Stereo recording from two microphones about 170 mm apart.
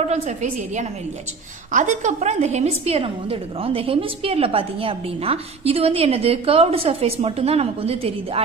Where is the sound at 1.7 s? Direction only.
45° right (ahead or behind).